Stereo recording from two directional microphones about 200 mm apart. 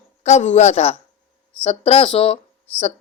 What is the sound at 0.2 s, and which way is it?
A woman's voice, 35° left (ahead or behind).